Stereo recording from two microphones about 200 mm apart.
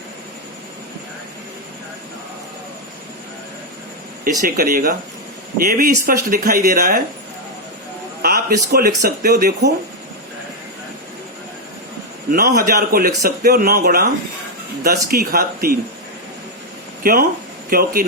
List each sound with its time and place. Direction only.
4.2 s a man's voice: 45° right (ahead or behind)
8.2 s a sound: 50° right (ahead or behind)
9.0 s speech: 55° right (ahead or behind)
12.3 s a man's voice: 50° right (ahead or behind)
17.0 s a man's voice: 45° right (ahead or behind)